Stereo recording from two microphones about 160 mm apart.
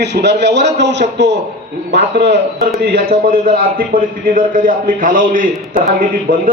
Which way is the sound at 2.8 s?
80° right.